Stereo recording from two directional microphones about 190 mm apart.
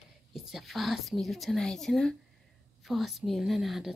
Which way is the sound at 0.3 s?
Centre (ahead or behind).